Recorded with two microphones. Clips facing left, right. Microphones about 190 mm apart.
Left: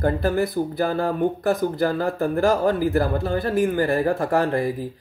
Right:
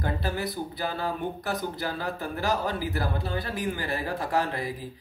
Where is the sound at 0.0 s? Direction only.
50° left (ahead or behind).